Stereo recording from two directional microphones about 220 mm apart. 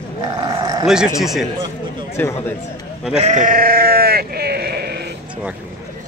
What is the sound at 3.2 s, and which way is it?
Sheep, 35° right (ahead or behind).